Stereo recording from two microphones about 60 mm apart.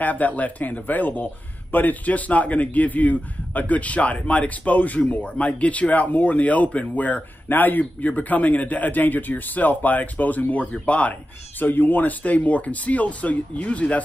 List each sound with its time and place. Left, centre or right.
0.0 s speech: left
11.6 s speech: left